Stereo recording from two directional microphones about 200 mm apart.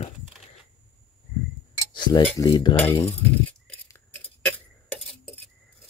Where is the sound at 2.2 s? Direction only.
15° left (ahead or behind).